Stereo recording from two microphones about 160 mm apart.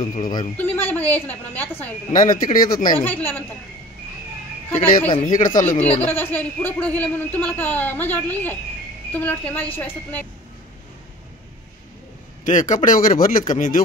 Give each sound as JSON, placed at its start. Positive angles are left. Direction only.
{"t": 0.2, "sound": "speech", "side_deg": 30}
{"t": 0.6, "sound": "a woman's voice", "side_deg": 15}
{"t": 2.1, "sound": "speech", "side_deg": 60}
{"t": 3.0, "sound": "a woman's voice", "side_deg": 10}
{"t": 4.7, "sound": "speech", "side_deg": 60}
{"t": 5.9, "sound": "a woman's voice", "side_deg": 10}
{"t": 12.4, "sound": "speech", "side_deg": 50}